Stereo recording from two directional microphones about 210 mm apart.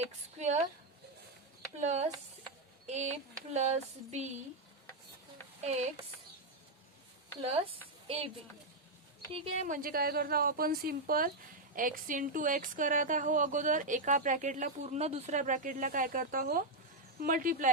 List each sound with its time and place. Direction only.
0.3 s speech: 30° right (ahead or behind)
1.8 s a woman's voice: 30° right (ahead or behind)
5.6 s a woman's voice: 30° right (ahead or behind)
7.4 s speech: 25° right (ahead or behind)
9.3 s speech: 25° right (ahead or behind)
9.6 s a woman's voice: 40° right (ahead or behind)